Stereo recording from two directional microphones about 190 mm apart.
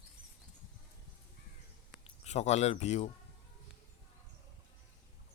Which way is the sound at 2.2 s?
35° left (ahead or behind).